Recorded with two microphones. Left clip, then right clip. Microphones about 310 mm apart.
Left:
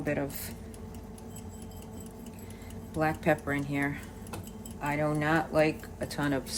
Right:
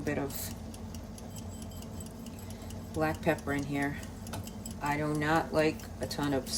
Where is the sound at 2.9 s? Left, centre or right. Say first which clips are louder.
Left 3 dB; left.